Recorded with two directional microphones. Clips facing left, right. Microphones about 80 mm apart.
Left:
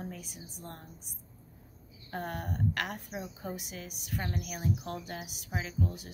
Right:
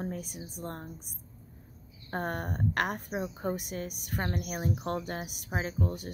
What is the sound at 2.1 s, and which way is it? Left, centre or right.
A woman's voice, right.